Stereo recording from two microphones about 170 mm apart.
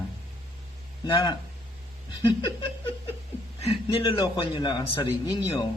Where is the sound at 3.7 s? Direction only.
30° left (ahead or behind).